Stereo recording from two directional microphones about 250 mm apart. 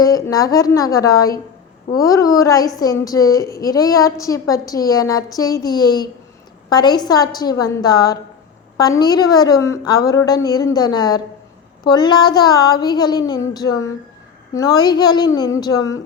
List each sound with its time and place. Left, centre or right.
0.0 s a woman's voice: centre